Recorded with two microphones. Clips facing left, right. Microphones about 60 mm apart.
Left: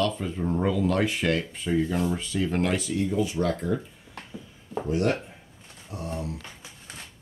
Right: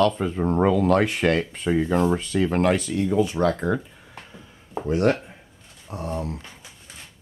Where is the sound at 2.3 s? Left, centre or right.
Right.